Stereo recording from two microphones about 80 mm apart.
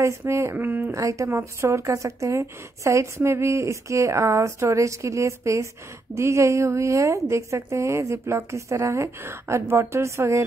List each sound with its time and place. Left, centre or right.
0.0 s speech: right
0.6 s speech: right
0.9 s speech: right